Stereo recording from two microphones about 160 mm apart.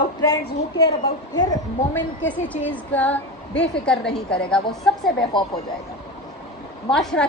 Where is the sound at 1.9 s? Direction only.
10° left (ahead or behind).